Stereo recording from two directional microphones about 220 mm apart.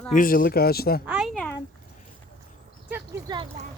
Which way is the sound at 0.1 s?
40° left (ahead or behind).